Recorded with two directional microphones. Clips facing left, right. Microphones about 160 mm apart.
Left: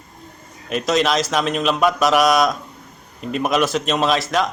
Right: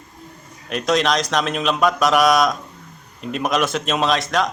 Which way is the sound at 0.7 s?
Centre (ahead or behind).